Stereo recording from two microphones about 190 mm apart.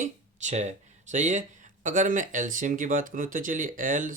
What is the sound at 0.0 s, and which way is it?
Speech, 40° right (ahead or behind).